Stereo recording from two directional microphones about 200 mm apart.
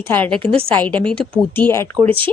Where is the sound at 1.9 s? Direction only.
25° right (ahead or behind).